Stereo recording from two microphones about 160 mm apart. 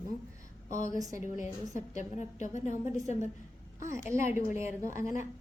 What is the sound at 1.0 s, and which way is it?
Speech, 20° right (ahead or behind).